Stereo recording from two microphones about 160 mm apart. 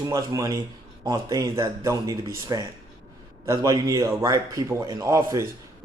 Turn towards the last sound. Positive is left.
turn(degrees=-20)  # may be behind; listen again after turning